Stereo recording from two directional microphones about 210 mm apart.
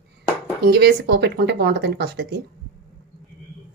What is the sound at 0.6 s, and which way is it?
Speech, 50° right (ahead or behind).